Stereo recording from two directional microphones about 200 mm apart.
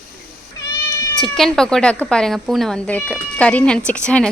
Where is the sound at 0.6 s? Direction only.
15° left (ahead or behind).